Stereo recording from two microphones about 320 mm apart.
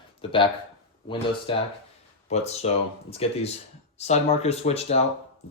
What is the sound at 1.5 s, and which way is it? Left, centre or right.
Speech, centre.